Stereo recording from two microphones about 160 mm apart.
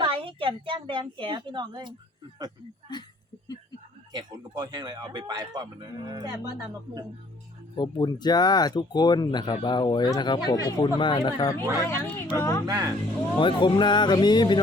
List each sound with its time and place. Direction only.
0.0 s a woman's voice: 35° right (ahead or behind)
2.9 s speech: 25° left (ahead or behind)
4.1 s speech: 25° right (ahead or behind)
7.8 s speech: 25° left (ahead or behind)
12.6 s speech: 20° right (ahead or behind)
13.4 s speech: 30° left (ahead or behind)